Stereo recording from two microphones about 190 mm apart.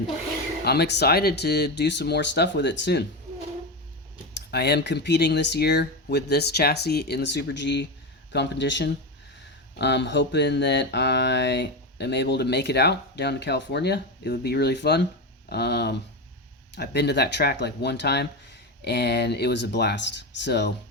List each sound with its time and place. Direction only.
0.6 s speech: 60° left (ahead or behind)
4.5 s speech: 60° left (ahead or behind)